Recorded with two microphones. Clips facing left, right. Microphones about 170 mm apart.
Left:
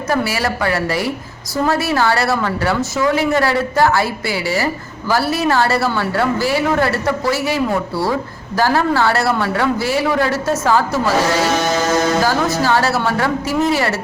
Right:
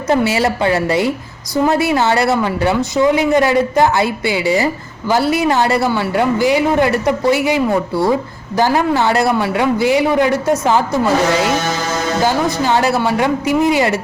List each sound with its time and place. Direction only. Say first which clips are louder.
0.1 s a woman's voice: right 5 dB; 20° right (ahead or behind)
12.6 s a woman's voice: right 3 dB; 20° right (ahead or behind)